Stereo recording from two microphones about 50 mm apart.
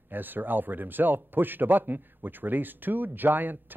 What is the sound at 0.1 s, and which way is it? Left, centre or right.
Speech, right.